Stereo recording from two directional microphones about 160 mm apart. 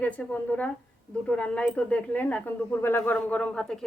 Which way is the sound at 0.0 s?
10° left (ahead or behind).